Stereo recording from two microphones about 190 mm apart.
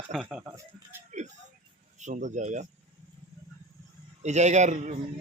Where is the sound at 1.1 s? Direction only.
40° right (ahead or behind).